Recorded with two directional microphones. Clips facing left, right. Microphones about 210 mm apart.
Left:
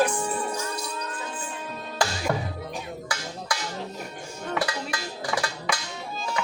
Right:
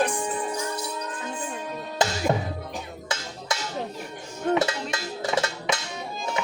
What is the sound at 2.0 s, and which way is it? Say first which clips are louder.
Music: right 2 dB; 20° right (ahead or behind).